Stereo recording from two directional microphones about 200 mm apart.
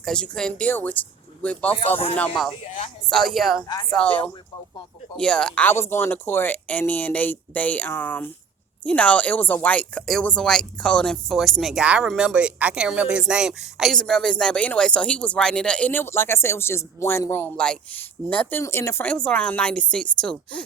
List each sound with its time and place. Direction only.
0.0 s speech: 5° left (ahead or behind)
3.7 s a woman's voice: 20° left (ahead or behind)
3.9 s speech: 5° left (ahead or behind)